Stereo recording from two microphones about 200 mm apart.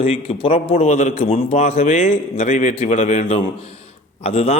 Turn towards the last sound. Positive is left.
turn(degrees=30)  # may be behind; listen again after turning